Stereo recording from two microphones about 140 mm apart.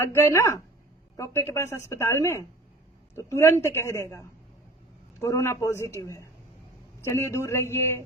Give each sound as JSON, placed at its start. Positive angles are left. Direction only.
{"t": 0.0, "sound": "speech", "side_deg": 20}